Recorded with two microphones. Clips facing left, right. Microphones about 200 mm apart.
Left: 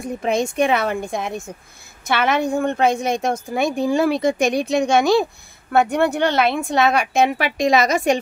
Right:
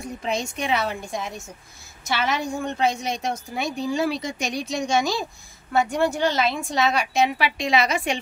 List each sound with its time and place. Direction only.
0.0 s a woman's voice: 50° left (ahead or behind)